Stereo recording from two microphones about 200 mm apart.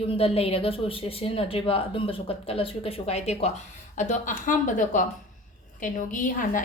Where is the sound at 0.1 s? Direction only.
30° left (ahead or behind).